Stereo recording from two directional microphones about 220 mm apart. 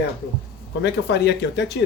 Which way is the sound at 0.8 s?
50° left (ahead or behind).